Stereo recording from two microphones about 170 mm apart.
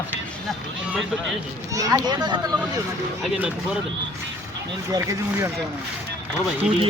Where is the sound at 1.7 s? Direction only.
20° right (ahead or behind).